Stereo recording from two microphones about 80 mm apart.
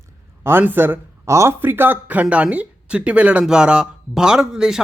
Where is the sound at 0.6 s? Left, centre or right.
Right.